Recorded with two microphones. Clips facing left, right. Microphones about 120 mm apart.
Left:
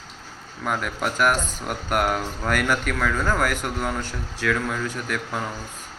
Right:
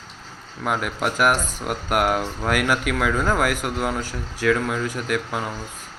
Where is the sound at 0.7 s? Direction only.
5° right (ahead or behind).